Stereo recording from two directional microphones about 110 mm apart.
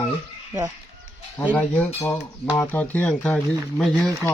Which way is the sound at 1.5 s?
15° left (ahead or behind).